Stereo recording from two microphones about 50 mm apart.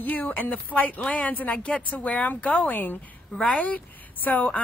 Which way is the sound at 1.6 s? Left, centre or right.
Centre.